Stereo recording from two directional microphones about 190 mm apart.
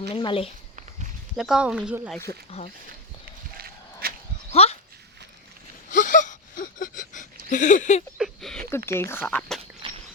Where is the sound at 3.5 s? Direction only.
55° right (ahead or behind).